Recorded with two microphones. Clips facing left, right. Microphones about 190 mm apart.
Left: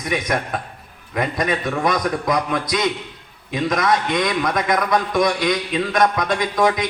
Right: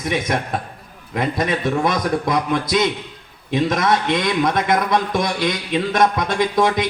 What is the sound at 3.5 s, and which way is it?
A man's voice, 30° right (ahead or behind).